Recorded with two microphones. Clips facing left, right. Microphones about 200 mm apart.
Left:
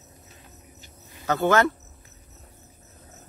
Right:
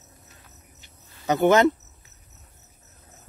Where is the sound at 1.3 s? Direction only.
20° right (ahead or behind).